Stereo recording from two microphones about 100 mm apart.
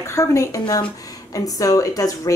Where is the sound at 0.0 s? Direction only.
30° left (ahead or behind).